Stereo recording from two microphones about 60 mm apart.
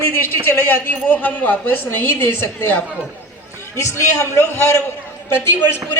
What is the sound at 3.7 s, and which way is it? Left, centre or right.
A man's voice, left.